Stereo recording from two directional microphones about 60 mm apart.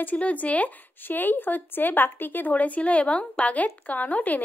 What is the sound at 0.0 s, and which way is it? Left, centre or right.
Speech, left.